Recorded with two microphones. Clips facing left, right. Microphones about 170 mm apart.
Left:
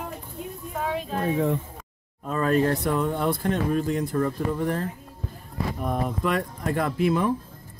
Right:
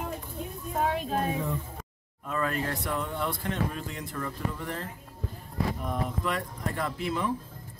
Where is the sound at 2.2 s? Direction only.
35° left (ahead or behind).